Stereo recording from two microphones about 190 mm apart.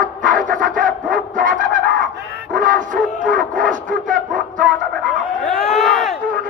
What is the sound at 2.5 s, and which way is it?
Dog, 45° right (ahead or behind).